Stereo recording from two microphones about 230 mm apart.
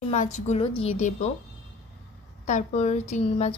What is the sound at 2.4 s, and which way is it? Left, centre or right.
Speech, left.